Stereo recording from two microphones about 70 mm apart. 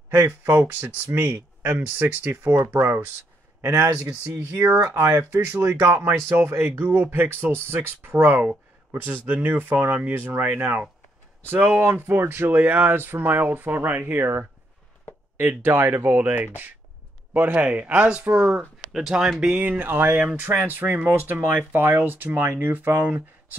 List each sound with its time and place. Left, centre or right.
0.6 s speech: right
4.3 s speech: right
5.5 s speech: right
11.8 s speech: right
15.6 s speech: right
18.9 s speech: centre
19.8 s speech: right